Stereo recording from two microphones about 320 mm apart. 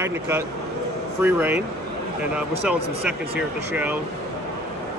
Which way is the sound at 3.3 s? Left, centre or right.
Centre.